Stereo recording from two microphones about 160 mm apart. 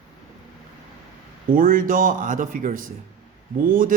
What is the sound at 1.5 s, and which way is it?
A man's voice, 60° right (ahead or behind).